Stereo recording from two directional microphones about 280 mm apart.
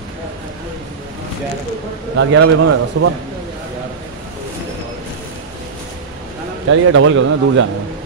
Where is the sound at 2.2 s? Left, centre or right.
Right.